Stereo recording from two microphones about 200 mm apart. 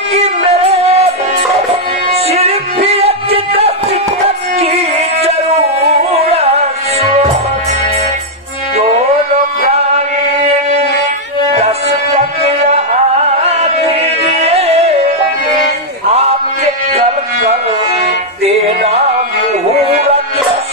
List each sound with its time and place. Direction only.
0.1 s music: 30° right (ahead or behind)
2.1 s music: 30° right (ahead or behind)
6.3 s music: 30° right (ahead or behind)
12.2 s music: 30° right (ahead or behind)
16.1 s a sound: 30° right (ahead or behind)
18.0 s music: 30° right (ahead or behind)